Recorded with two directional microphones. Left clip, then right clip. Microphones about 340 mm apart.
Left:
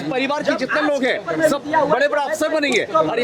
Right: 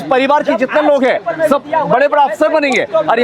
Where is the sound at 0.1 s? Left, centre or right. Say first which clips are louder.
Right 9 dB; right.